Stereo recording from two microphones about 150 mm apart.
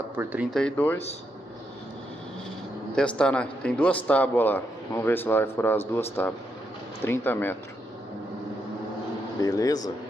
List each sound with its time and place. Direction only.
0.1 s speech: 10° right (ahead or behind)
0.5 s a man's voice: 5° left (ahead or behind)
3.0 s a man's voice: 5° left (ahead or behind)
9.4 s speech: 25° left (ahead or behind)